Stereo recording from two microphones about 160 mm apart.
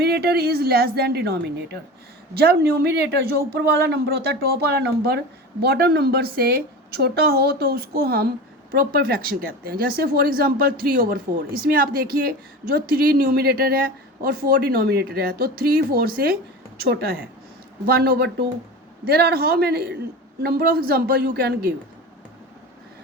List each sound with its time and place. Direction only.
0.0 s speech: 80° right
5.6 s a woman's voice: 80° right
19.0 s a woman's voice: 75° right (ahead or behind)